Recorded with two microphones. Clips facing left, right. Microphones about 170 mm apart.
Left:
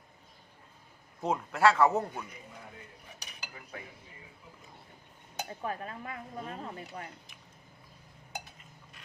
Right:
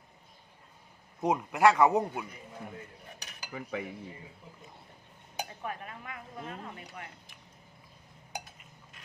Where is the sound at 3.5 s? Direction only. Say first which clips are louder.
Right 11 dB; 85° right.